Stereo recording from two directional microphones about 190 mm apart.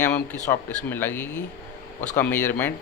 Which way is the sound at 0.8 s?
10° left (ahead or behind).